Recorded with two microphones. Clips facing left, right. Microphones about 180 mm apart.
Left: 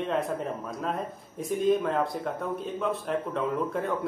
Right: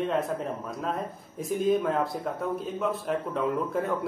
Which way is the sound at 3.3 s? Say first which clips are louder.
Right 2 dB; centre (ahead or behind).